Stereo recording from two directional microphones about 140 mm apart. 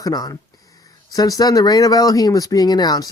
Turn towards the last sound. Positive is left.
turn(degrees=30)  # may be behind; listen again after turning